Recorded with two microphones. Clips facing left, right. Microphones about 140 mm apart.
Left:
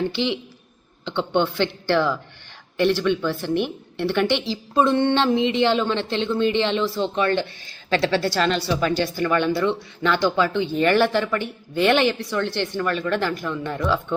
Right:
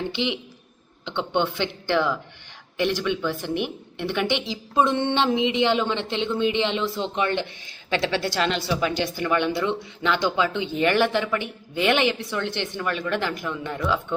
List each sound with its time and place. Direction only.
0.1 s a woman's voice: 15° right (ahead or behind)